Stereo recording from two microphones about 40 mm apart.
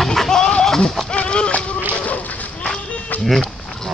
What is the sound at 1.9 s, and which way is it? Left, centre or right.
Whip, left.